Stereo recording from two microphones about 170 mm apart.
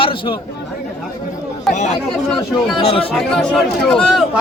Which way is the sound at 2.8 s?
30° left (ahead or behind).